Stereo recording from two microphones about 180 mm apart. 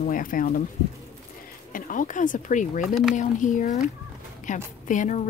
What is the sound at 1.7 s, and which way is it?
A woman's voice, 45° left (ahead or behind).